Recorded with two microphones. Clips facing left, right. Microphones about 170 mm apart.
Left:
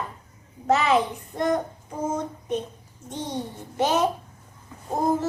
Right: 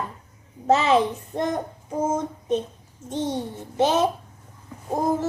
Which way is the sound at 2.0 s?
25° right (ahead or behind).